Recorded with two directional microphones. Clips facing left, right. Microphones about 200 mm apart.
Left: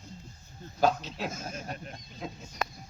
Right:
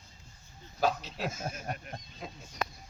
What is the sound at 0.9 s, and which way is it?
Speech, 5° right (ahead or behind).